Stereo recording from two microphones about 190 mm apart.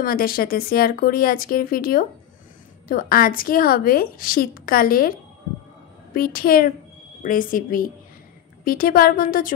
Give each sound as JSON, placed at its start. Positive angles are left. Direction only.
{"t": 0.0, "sound": "a woman's voice", "side_deg": 50}
{"t": 6.1, "sound": "a woman's voice", "side_deg": 50}